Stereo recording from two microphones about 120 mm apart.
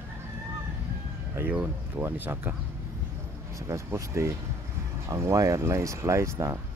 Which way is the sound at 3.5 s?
25° right (ahead or behind).